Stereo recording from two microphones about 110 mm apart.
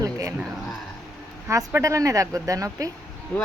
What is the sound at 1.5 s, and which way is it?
Speech, 30° right (ahead or behind).